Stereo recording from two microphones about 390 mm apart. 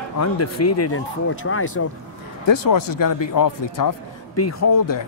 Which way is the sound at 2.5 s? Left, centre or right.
Left.